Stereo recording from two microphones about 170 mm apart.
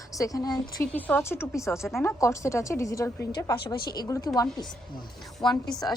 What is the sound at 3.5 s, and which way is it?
Speech, 70° left (ahead or behind).